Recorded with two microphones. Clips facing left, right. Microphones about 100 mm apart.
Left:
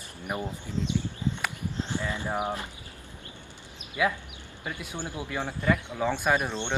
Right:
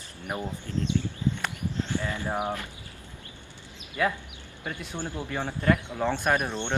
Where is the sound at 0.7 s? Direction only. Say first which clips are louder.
Right 3 dB; 15° left (ahead or behind).